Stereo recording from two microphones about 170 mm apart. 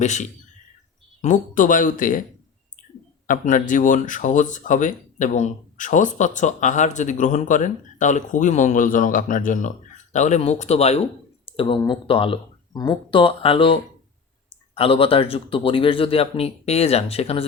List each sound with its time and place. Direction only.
0.0 s speech: 45° left (ahead or behind)
3.2 s speech: 50° left (ahead or behind)
11.4 s a sound: 35° left (ahead or behind)
11.8 s speech: 30° left (ahead or behind)
14.8 s speech: 35° left (ahead or behind)